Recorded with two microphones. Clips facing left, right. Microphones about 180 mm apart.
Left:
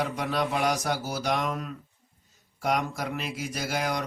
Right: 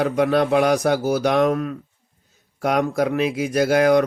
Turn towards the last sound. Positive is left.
turn(degrees=-60)  # may be behind; listen again after turning